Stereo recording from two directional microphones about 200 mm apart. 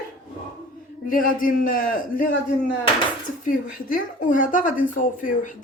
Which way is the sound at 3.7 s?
40° left (ahead or behind).